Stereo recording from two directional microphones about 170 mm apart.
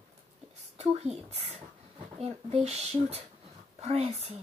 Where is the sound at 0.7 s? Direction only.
40° right (ahead or behind).